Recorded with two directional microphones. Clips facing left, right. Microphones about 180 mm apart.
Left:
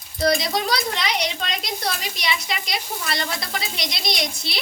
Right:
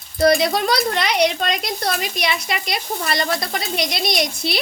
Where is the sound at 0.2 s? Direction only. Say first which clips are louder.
Right 5 dB; 55° right (ahead or behind).